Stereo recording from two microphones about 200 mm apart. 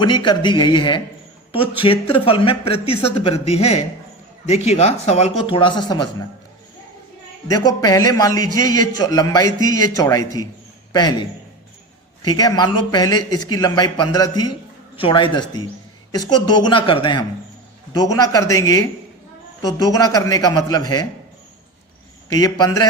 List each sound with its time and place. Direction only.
0.0 s a man's voice: 20° left (ahead or behind)
7.4 s a man's voice: 15° left (ahead or behind)
22.3 s a man's voice: 20° left (ahead or behind)